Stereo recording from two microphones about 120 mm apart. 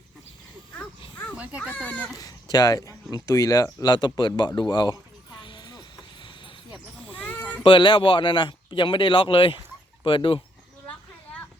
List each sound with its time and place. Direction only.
1.4 s a child's voice: 10° right (ahead or behind)
1.8 s a child's voice: 10° left (ahead or behind)
2.1 s a sound: 35° left (ahead or behind)
7.2 s cat: 10° left (ahead or behind)
7.6 s speech: 40° left (ahead or behind)
10.8 s a sound: 10° left (ahead or behind)